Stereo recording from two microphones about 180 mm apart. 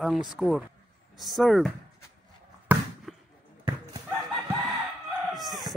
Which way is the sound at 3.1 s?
Centre (ahead or behind).